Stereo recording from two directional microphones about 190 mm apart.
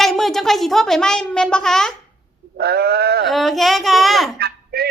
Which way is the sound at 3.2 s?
Centre (ahead or behind).